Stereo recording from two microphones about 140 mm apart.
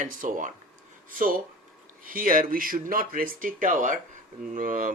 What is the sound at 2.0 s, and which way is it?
Speech, 80° right.